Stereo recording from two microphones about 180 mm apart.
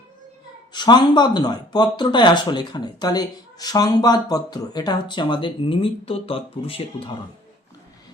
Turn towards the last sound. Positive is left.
turn(degrees=30)  # may be behind; listen again after turning